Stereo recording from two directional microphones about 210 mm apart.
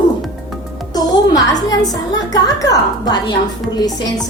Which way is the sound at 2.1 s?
15° left (ahead or behind).